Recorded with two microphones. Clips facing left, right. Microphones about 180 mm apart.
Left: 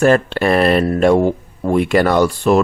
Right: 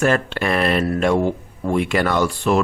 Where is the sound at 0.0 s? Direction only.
35° left (ahead or behind).